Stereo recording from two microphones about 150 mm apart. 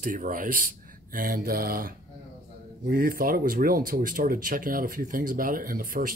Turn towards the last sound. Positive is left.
turn(degrees=-70)  # may be behind; listen again after turning